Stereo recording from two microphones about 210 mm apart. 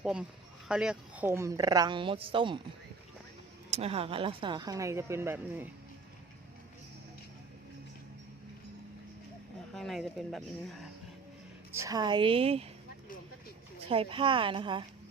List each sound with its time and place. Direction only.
0.0 s speech: 5° right (ahead or behind); by 2.6 s 25° right (ahead or behind)
3.7 s speech: 30° right (ahead or behind); by 5.6 s 10° right (ahead or behind)
9.7 s speech: centre (ahead or behind)
11.7 s speech: 15° right (ahead or behind)
13.9 s speech: 25° right (ahead or behind)